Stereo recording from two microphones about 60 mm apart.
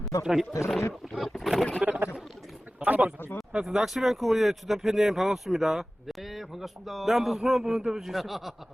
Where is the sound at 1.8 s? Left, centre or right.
Right.